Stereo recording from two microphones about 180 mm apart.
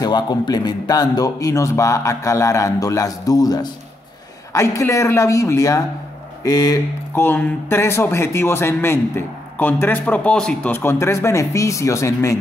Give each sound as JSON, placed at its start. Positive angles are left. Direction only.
{"t": 0.0, "sound": "a man's voice", "side_deg": 25}